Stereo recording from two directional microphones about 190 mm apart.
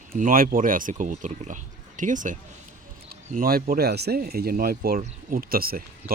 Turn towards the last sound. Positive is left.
turn(degrees=-50)  # may be behind; listen again after turning